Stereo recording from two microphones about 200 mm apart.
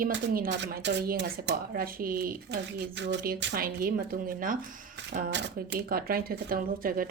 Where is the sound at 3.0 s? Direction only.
60° right (ahead or behind); by 4.6 s 45° right (ahead or behind).